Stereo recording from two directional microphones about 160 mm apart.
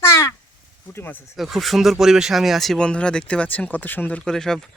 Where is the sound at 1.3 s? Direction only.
Centre (ahead or behind).